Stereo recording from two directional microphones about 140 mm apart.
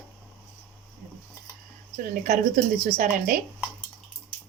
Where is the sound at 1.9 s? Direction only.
85° right.